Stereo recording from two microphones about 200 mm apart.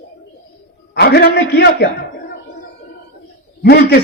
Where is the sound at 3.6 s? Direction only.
55° left (ahead or behind).